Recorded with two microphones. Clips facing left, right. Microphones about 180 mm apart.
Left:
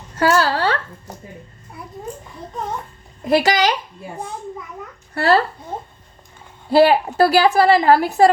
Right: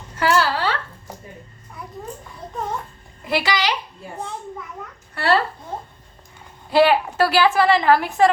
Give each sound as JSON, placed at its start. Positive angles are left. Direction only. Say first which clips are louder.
{"t": 0.2, "sound": "a sound", "louder": "left 3 dB", "side_deg": 40}
{"t": 3.2, "sound": "speech", "louder": "left 6 dB", "side_deg": 45}
{"t": 5.1, "sound": "a woman's voice", "louder": "left 3 dB", "side_deg": 35}
{"t": 6.7, "sound": "a woman's voice", "louder": "left 3 dB", "side_deg": 40}